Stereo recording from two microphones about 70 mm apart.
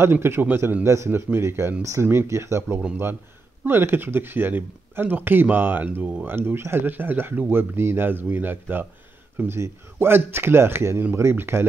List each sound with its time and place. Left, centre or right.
0.0 s speech: right
0.8 s speech: right